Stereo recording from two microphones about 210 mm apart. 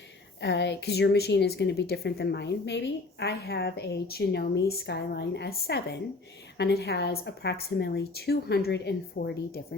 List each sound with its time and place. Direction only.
0.4 s speech: 55° left (ahead or behind)